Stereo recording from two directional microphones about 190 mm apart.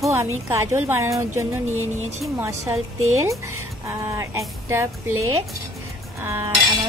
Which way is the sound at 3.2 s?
15° right (ahead or behind).